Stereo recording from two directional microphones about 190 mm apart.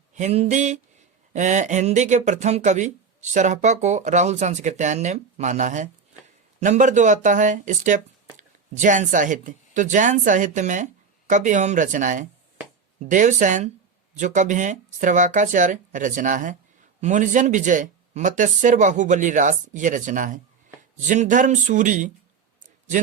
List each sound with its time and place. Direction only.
0.1 s speech: 35° right (ahead or behind)